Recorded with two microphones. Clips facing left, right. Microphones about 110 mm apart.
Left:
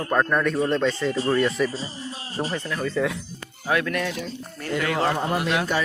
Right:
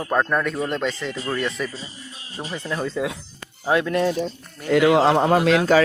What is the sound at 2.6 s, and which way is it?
Speech, 30° right (ahead or behind).